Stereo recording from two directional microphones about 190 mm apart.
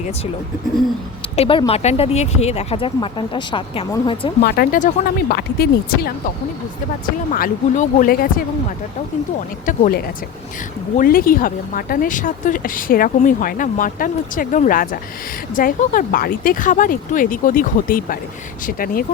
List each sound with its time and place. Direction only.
1.4 s speech: 30° left (ahead or behind)
4.4 s speech: 50° left (ahead or behind)
9.6 s speech: 45° left (ahead or behind)